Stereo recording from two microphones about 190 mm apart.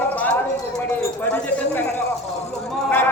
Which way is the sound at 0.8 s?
10° left (ahead or behind).